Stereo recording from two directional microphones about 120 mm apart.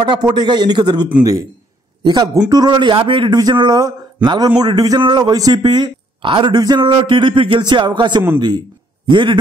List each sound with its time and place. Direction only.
0.0 s a man's voice: 40° right (ahead or behind)
2.0 s a man's voice: 35° right (ahead or behind)